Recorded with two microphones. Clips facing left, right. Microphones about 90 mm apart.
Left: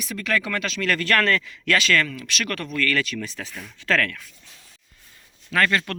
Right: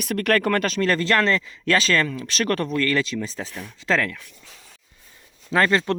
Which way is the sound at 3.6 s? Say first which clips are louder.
Even; 20° right (ahead or behind).